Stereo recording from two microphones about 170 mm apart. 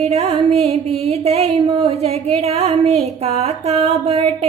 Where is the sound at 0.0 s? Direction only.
40° right (ahead or behind).